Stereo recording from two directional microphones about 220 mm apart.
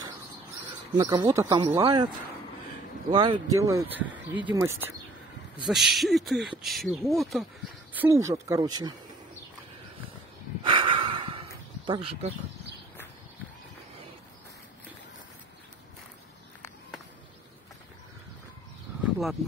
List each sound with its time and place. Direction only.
0.9 s speech: 20° right (ahead or behind)
3.1 s speech: 20° right (ahead or behind)
5.7 s speech: centre (ahead or behind)
7.9 s speech: 10° right (ahead or behind)
10.6 s snort: 20° right (ahead or behind)